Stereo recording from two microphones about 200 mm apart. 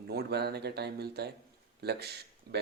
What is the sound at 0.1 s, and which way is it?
Speech, 55° right (ahead or behind).